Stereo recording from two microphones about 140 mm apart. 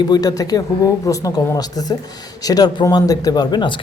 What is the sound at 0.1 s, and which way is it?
Speech, 25° left (ahead or behind).